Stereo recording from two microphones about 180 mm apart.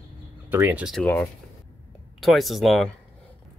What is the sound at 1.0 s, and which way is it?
Speech, 10° left (ahead or behind).